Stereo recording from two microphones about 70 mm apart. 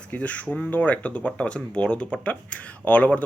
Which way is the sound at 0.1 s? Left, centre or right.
Left.